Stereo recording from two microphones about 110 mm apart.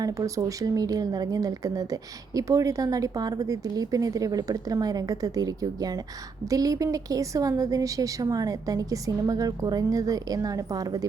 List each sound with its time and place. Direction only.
0.0 s speech: 30° right (ahead or behind)